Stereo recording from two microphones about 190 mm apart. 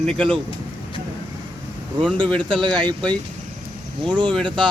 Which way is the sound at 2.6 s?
25° right (ahead or behind).